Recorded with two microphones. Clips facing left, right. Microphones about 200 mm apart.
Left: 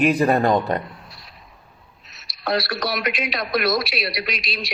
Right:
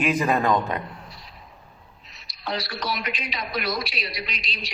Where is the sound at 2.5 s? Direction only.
75° left (ahead or behind).